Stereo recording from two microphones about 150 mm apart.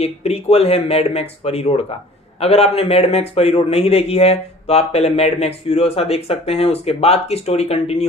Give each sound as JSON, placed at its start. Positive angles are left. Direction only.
{"t": 0.0, "sound": "a man's voice", "side_deg": 45}